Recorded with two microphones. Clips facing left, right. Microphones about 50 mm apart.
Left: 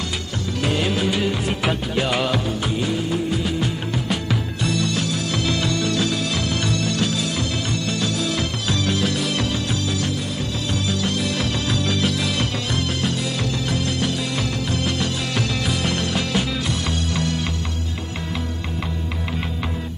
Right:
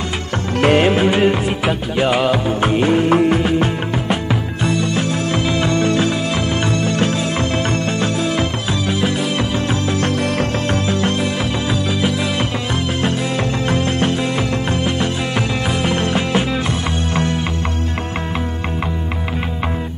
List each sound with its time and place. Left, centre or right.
0.6 s music: right
1.6 s music: centre
2.6 s music: right
4.3 s music: right
10.7 s music: right
11.7 s music: centre
13.7 s music: right